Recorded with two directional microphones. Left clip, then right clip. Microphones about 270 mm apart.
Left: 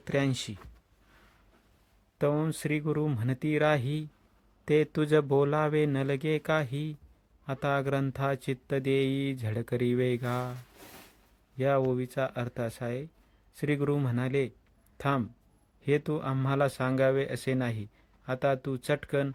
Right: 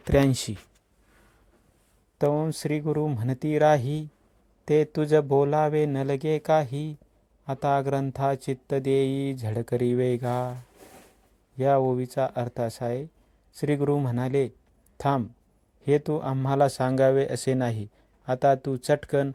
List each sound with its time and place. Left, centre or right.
0.0 s speech: right
2.1 s speech: centre